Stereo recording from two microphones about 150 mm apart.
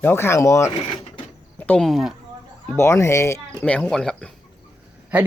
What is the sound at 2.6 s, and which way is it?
Speech, 15° left (ahead or behind).